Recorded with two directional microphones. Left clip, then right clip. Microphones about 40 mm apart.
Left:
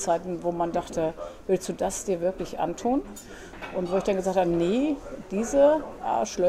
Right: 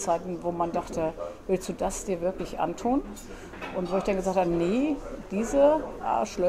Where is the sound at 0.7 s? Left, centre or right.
Left.